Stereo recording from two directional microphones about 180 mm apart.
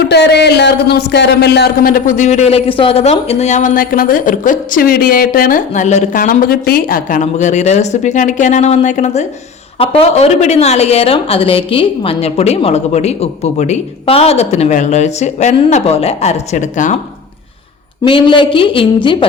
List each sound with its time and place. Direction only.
0.1 s a woman's voice: 65° left (ahead or behind); by 17.0 s 45° left (ahead or behind)
18.0 s speech: 30° left (ahead or behind)